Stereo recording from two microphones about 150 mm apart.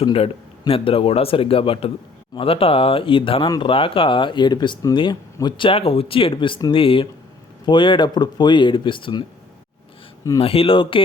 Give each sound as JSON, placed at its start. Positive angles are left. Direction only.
{"t": 0.0, "sound": "speech", "side_deg": 40}
{"t": 10.4, "sound": "speech", "side_deg": 40}